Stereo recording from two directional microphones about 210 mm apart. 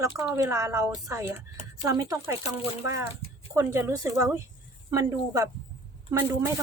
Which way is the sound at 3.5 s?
10° right (ahead or behind).